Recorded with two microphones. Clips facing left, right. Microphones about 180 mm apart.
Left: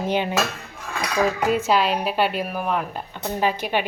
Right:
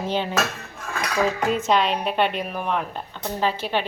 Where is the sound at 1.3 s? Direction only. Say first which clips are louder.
Left 1 dB; 10° left (ahead or behind).